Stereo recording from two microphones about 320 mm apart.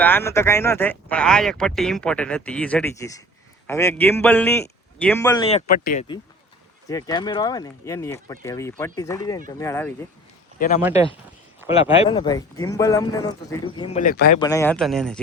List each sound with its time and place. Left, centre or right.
0.0 s speech: centre; by 6.1 s left
6.8 s speech: centre
11.7 s speech: centre
14.3 s speech: centre